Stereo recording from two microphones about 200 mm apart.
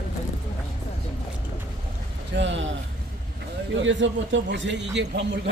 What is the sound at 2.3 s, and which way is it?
Speech, 65° right (ahead or behind).